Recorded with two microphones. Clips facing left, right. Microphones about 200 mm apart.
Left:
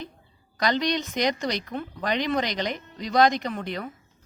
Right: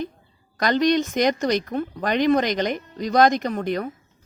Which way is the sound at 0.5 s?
50° right (ahead or behind).